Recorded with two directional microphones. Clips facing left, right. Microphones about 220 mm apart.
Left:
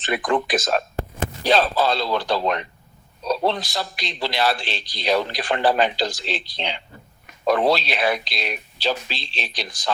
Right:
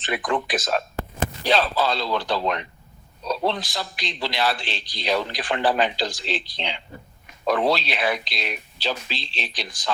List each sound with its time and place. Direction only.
0.0 s a man's voice: 45° left (ahead or behind)